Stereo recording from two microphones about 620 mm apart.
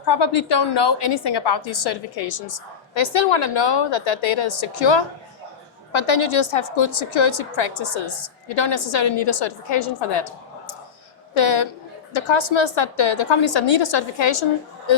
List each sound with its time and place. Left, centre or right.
0.0 s a woman's voice: left
11.3 s a woman's voice: left